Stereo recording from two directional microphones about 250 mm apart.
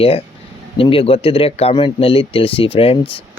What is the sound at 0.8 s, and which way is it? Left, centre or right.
Speech, left.